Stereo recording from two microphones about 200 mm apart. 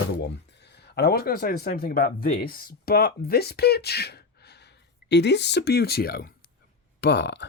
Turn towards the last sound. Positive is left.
turn(degrees=60)  # may be behind; listen again after turning